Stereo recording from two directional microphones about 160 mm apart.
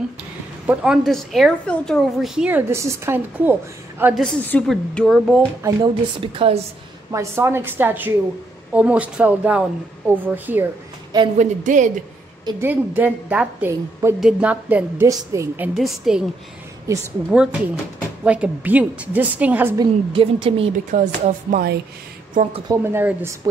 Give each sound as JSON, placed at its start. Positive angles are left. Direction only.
{"t": 0.7, "sound": "a woman's voice", "side_deg": 0}
{"t": 4.1, "sound": "a woman's voice", "side_deg": 5}
{"t": 5.6, "sound": "a woman's voice", "side_deg": -30}
{"t": 7.1, "sound": "speech", "side_deg": -15}
{"t": 11.3, "sound": "speech", "side_deg": -50}
{"t": 12.5, "sound": "speech", "side_deg": -10}
{"t": 15.7, "sound": "a woman's voice", "side_deg": 0}
{"t": 17.3, "sound": "speech", "side_deg": -5}
{"t": 19.8, "sound": "a woman's voice", "side_deg": -35}
{"t": 20.9, "sound": "speech", "side_deg": -55}
{"t": 22.7, "sound": "speech", "side_deg": -15}